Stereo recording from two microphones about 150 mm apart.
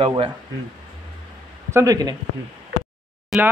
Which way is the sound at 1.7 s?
20° right (ahead or behind).